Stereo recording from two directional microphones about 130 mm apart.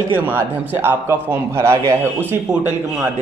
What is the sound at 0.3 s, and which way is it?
A man's voice, 20° right (ahead or behind).